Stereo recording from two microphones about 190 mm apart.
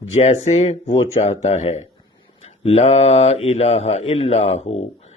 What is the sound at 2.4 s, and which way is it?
Mantra, 35° left (ahead or behind).